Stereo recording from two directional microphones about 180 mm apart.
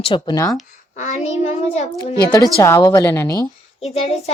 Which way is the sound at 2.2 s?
20° left (ahead or behind).